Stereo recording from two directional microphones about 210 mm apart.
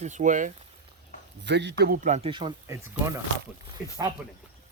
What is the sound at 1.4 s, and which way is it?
Speech, 55° right (ahead or behind).